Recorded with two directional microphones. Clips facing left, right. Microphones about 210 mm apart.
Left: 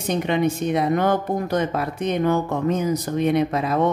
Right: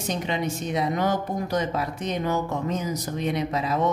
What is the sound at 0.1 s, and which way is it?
Speech, 55° left (ahead or behind).